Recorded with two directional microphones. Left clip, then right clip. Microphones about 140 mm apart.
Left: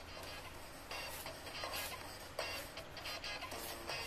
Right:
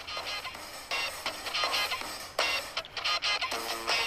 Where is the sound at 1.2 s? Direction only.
15° right (ahead or behind).